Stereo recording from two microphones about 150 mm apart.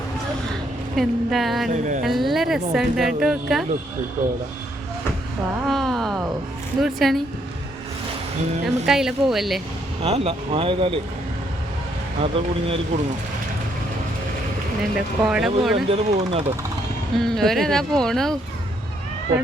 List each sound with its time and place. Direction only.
0.9 s speech: centre (ahead or behind)
1.7 s speech: 55° right (ahead or behind)
2.0 s speech: centre (ahead or behind)
5.6 s a sound: centre (ahead or behind)
6.8 s speech: centre (ahead or behind)
8.6 s speech: 5° right (ahead or behind)
10.0 s speech: 40° right (ahead or behind)
12.2 s speech: 40° right (ahead or behind)
14.9 s speech: 5° right (ahead or behind)
15.9 s speech: 40° right (ahead or behind)
17.2 s speech: centre (ahead or behind)